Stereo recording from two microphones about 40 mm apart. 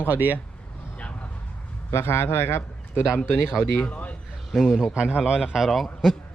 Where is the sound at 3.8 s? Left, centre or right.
Left.